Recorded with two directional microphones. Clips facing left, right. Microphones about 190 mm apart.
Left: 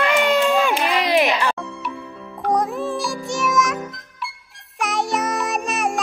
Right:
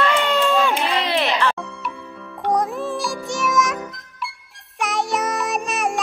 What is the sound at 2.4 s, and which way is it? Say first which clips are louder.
Music: even; centre (ahead or behind).